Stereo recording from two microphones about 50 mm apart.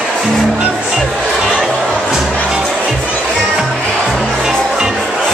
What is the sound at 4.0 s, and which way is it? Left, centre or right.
Music, centre.